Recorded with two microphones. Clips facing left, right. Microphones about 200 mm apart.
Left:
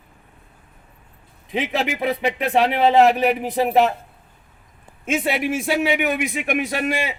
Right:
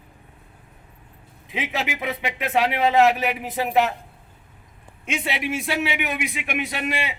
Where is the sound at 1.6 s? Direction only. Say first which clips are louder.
Left 4 dB; centre (ahead or behind).